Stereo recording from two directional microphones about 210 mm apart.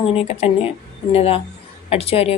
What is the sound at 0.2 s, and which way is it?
Speech, 30° left (ahead or behind).